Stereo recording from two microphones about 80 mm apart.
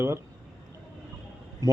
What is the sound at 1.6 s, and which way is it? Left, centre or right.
Speech, right.